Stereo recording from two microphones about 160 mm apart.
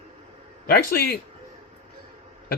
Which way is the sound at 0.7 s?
80° left.